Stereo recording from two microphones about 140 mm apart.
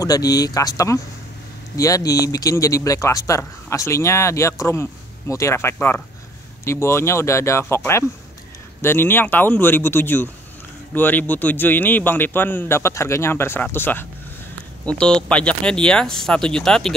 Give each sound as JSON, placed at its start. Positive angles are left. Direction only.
{"t": 0.0, "sound": "a man's voice", "side_deg": 25}